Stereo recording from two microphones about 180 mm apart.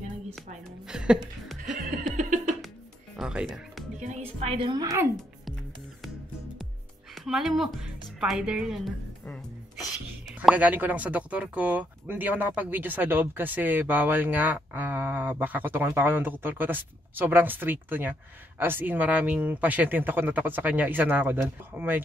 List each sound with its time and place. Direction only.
0.8 s a sound: 5° right (ahead or behind)
2.1 s music: 45° right (ahead or behind)
3.2 s music: 5° right (ahead or behind)
4.0 s a woman's voice: 40° right (ahead or behind); by 5.0 s 20° right (ahead or behind)
7.2 s speech: centre (ahead or behind)